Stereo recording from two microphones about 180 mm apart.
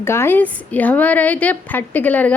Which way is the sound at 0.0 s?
15° left (ahead or behind).